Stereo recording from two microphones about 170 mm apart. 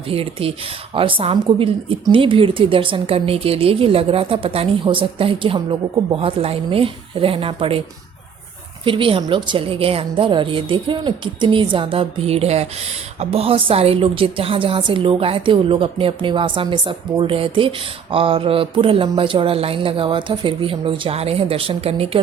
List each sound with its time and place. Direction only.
0.1 s a woman's voice: 35° right (ahead or behind)
8.8 s a woman's voice: 30° right (ahead or behind)